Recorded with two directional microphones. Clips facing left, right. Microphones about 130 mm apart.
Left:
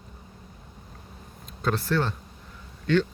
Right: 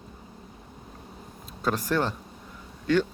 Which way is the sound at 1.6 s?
10° right (ahead or behind).